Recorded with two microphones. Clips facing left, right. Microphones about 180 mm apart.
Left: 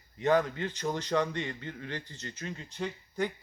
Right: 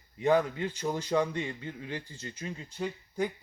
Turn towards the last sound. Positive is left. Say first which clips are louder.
# right 1 dB
turn(degrees=-10)  # may be behind; listen again after turning